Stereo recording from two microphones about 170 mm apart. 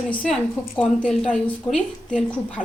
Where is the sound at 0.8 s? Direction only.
5° left (ahead or behind).